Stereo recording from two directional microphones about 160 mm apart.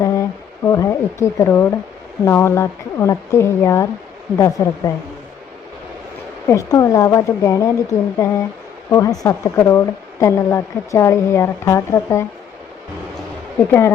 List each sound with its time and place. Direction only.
0.0 s a sound: 20° left (ahead or behind)
2.2 s speech: 15° left (ahead or behind)
6.5 s speech: 20° left (ahead or behind)
13.6 s speech: 15° left (ahead or behind)